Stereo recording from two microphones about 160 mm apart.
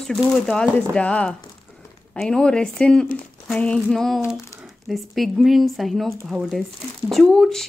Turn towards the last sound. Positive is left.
turn(degrees=5)  # may be behind; listen again after turning